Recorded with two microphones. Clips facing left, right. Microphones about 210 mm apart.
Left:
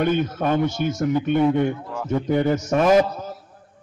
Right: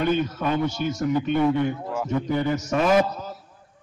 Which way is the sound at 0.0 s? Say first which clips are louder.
Left 2 dB; 50° left (ahead or behind).